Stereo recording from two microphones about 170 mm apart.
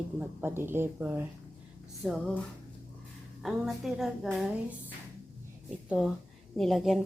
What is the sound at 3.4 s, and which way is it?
Speech, centre (ahead or behind).